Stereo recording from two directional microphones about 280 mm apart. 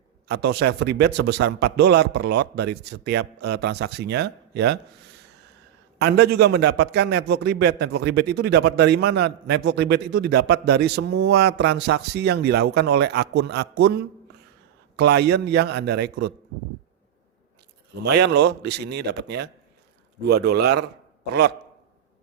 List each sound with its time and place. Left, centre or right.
0.3 s a man's voice: right
6.0 s a man's voice: right
18.0 s a man's voice: right